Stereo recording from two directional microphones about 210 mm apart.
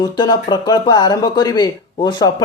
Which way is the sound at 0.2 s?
20° left (ahead or behind).